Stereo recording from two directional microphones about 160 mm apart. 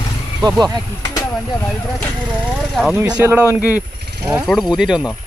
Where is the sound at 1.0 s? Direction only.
25° left (ahead or behind).